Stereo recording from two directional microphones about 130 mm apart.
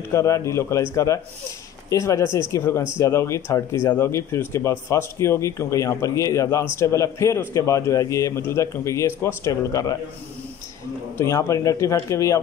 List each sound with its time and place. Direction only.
0.1 s speech: 20° left (ahead or behind)
11.1 s speech: 25° left (ahead or behind)